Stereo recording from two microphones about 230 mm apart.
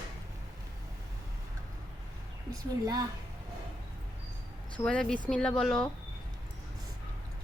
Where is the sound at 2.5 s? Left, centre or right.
Centre.